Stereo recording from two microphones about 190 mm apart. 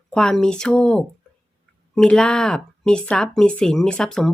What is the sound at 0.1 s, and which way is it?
Speech, 5° left (ahead or behind).